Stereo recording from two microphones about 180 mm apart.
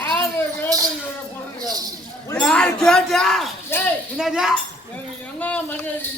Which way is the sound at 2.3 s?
5° left (ahead or behind).